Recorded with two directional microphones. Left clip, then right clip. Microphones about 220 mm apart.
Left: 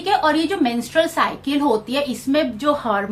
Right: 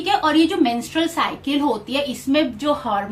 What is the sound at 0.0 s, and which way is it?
A woman's voice, 30° left (ahead or behind).